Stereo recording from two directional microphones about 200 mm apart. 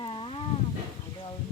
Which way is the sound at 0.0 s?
25° left (ahead or behind).